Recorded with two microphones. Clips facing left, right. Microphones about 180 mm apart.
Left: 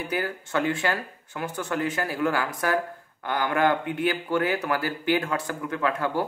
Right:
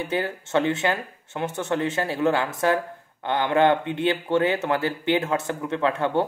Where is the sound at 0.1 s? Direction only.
25° right (ahead or behind).